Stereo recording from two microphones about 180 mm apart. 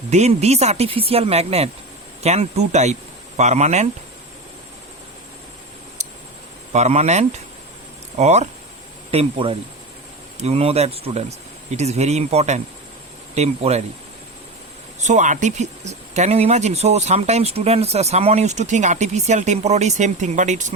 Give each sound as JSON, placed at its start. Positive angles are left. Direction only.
{"t": 0.1, "sound": "speech", "side_deg": -35}
{"t": 6.0, "sound": "a sound", "side_deg": -40}
{"t": 6.7, "sound": "speech", "side_deg": -40}
{"t": 15.0, "sound": "speech", "side_deg": -45}